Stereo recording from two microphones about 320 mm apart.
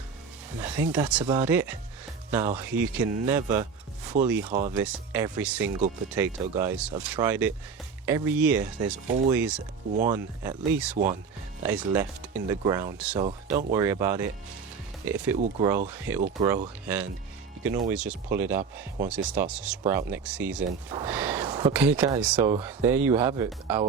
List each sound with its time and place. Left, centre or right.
0.8 s speech: centre
9.9 s speech: right
10.2 s speech: centre
10.9 s speech: right
11.6 s speech: centre
13.2 s speech: right
13.7 s speech: centre